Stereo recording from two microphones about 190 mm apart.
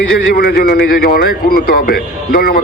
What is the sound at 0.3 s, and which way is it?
A man's voice, 55° left (ahead or behind).